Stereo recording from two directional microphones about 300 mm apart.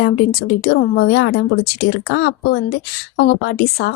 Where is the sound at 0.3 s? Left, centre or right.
Left.